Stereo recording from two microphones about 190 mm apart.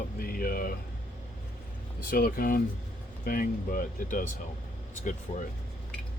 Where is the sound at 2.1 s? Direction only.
50° left (ahead or behind).